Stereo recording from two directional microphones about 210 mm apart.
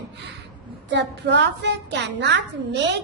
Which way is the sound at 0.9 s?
55° right (ahead or behind).